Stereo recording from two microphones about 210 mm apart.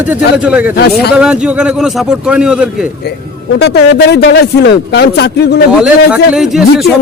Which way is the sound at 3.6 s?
50° left (ahead or behind).